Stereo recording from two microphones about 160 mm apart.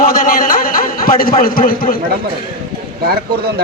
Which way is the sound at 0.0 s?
60° left (ahead or behind).